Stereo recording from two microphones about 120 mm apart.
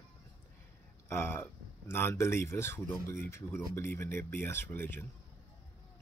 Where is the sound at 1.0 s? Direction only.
20° left (ahead or behind).